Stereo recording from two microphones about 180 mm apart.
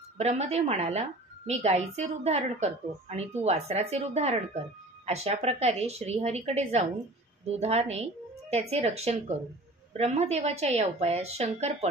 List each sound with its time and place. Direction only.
0.2 s a woman's voice: 35° right (ahead or behind)